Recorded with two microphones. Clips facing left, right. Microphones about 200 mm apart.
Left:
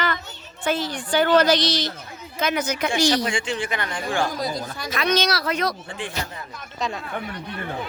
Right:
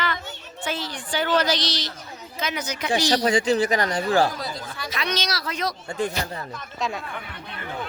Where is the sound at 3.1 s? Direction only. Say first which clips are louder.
Right 3 dB; 40° right (ahead or behind).